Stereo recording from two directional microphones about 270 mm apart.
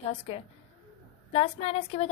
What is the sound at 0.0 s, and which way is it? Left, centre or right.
A woman's voice, left.